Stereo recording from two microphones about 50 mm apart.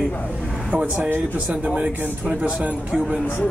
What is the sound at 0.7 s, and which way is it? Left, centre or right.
A man's voice, right.